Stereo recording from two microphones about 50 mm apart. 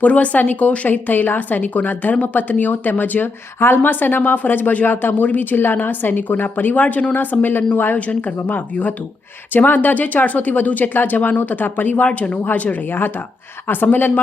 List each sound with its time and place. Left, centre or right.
0.0 s speech: left
12.0 s a woman's voice: left